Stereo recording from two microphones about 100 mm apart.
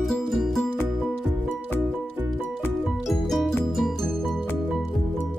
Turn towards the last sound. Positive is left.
turn(degrees=5)  # may be behind; listen again after turning